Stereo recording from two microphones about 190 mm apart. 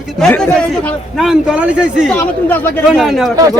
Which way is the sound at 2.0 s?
10° left (ahead or behind).